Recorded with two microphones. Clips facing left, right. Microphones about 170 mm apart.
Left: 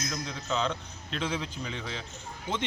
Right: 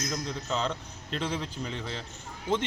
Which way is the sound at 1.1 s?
Centre (ahead or behind).